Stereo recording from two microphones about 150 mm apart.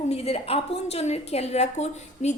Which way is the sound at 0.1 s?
40° left (ahead or behind).